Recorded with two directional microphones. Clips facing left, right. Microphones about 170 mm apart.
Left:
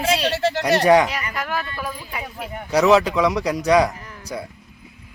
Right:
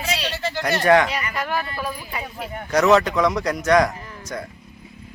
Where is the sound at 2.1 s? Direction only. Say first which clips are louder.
Even; 10° left (ahead or behind).